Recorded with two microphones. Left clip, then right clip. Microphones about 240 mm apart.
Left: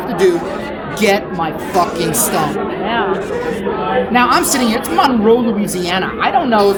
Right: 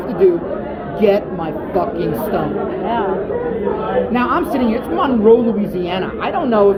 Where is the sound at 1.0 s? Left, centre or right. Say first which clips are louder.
Even; left.